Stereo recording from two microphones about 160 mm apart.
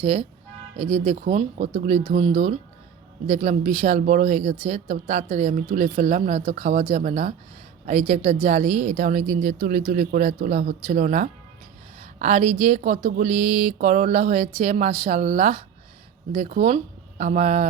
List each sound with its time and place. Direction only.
0.0 s a woman's voice: 40° right (ahead or behind)